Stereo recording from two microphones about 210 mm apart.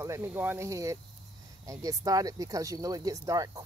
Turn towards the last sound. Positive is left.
turn(degrees=-15)  # may be behind; listen again after turning